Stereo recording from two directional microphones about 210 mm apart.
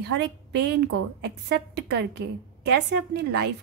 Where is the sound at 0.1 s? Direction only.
55° right (ahead or behind).